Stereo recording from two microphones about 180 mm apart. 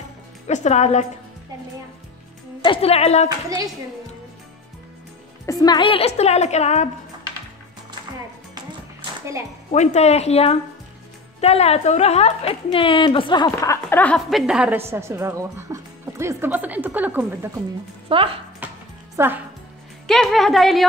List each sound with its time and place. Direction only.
0.5 s a woman's voice: 40° left (ahead or behind)
2.6 s a woman's voice: 30° left (ahead or behind)
3.3 s a woman's voice: 20° right (ahead or behind)
5.5 s a woman's voice: 20° left (ahead or behind); by 6.9 s 40° left (ahead or behind)
9.7 s a woman's voice: 40° left (ahead or behind); by 14.4 s 5° left (ahead or behind)
14.4 s speech: 5° right (ahead or behind)
18.0 s speech: 30° right (ahead or behind)
18.6 s music: 10° right (ahead or behind)
19.1 s speech: 10° right (ahead or behind)
20.1 s speech: centre (ahead or behind)